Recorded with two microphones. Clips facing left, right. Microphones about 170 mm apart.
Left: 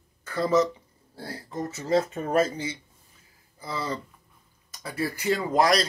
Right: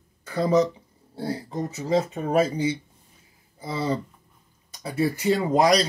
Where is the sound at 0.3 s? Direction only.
15° right (ahead or behind).